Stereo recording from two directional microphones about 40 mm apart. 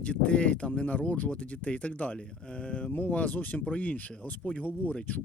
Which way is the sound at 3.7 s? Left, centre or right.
Left.